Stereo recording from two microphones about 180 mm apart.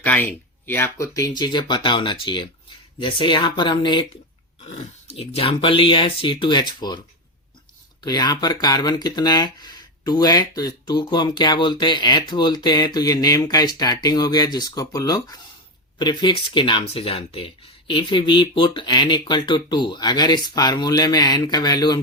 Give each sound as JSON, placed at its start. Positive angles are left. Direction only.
{"t": 0.0, "sound": "speech", "side_deg": 10}
{"t": 4.6, "sound": "speech", "side_deg": 35}
{"t": 8.0, "sound": "speech", "side_deg": 20}